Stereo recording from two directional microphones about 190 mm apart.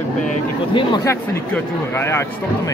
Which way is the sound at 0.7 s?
25° left (ahead or behind).